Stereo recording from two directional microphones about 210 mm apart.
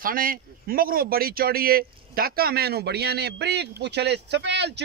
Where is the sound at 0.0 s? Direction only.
40° right (ahead or behind).